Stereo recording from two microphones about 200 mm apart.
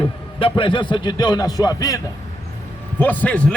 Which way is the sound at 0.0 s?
25° left (ahead or behind).